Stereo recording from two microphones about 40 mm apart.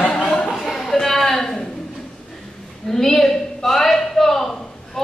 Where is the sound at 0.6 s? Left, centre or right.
Centre.